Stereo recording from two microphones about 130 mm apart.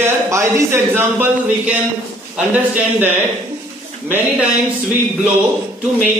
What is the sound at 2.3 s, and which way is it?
Speech, 10° right (ahead or behind).